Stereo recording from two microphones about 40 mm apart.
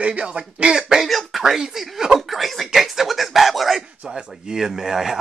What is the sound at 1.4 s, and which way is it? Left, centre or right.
A man's voice, centre.